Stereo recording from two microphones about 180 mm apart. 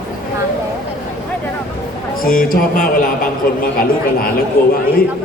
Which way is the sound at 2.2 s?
50° left (ahead or behind).